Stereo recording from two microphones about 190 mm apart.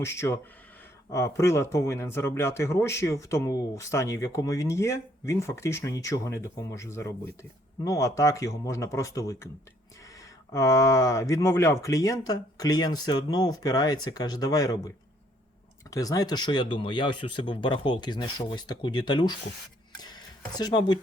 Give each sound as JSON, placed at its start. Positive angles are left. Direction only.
{"t": 0.0, "sound": "speech", "side_deg": 15}
{"t": 10.5, "sound": "speech", "side_deg": 15}